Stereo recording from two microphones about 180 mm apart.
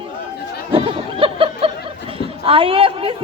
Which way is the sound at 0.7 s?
30° right (ahead or behind).